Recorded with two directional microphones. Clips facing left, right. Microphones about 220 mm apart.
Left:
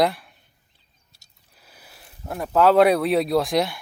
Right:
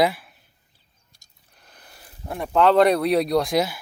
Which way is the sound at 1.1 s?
5° left (ahead or behind).